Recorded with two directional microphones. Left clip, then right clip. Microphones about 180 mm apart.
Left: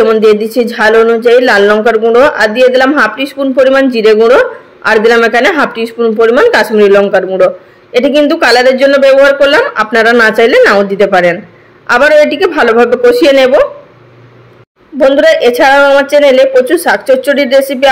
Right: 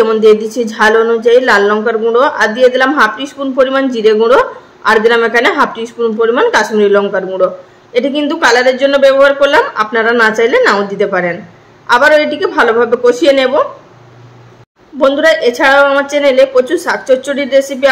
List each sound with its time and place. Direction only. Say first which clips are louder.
0.0 s speech: left 2 dB; 15° left (ahead or behind)
15.0 s speech: left 3 dB; 20° left (ahead or behind)